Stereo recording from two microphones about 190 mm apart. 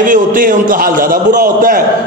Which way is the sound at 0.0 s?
45° right (ahead or behind).